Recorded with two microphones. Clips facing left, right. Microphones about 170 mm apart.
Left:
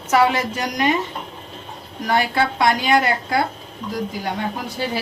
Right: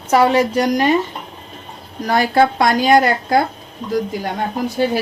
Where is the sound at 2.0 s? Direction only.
40° right (ahead or behind).